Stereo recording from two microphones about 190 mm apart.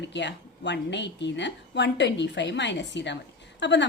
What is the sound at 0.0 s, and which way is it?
A woman's voice, 70° left (ahead or behind).